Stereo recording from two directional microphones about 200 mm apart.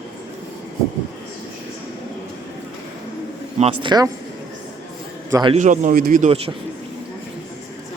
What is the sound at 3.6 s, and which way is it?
Speech, 25° right (ahead or behind).